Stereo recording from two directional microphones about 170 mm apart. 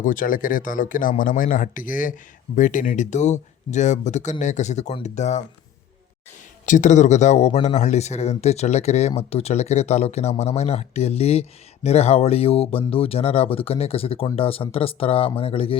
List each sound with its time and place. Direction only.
0.0 s speech: 50° left (ahead or behind)
6.7 s speech: 50° left (ahead or behind)